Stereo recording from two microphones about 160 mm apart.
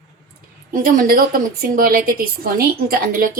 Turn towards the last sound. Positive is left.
turn(degrees=-60)  # may be behind; listen again after turning